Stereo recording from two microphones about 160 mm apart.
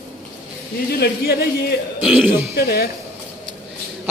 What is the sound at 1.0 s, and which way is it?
Speech, 85° left.